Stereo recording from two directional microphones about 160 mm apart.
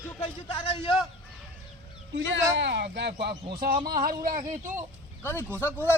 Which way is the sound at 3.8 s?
65° right (ahead or behind).